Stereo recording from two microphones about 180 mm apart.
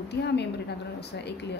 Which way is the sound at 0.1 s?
70° left (ahead or behind).